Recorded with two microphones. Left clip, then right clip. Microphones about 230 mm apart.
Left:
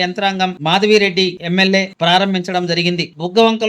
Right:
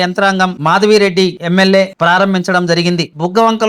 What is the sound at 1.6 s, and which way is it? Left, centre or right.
Speech, right.